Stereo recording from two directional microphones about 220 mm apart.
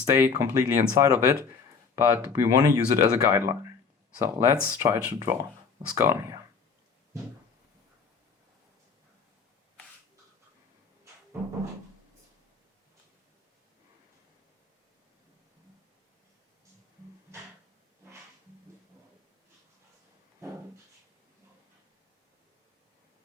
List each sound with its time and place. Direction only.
0.0 s speech: 15° right (ahead or behind)